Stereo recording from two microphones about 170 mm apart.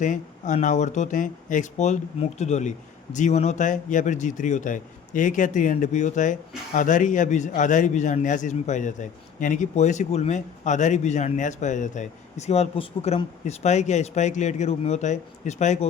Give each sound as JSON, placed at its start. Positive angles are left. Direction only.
{"t": 0.0, "sound": "a man's voice", "side_deg": 45}